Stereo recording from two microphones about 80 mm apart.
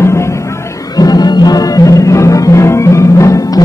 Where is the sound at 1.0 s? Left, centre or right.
Left.